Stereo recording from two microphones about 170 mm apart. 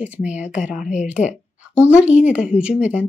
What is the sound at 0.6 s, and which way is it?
Speech, 45° left (ahead or behind).